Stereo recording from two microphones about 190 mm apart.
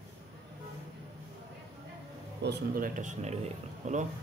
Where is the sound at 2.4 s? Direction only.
55° right (ahead or behind); by 4.1 s 40° right (ahead or behind).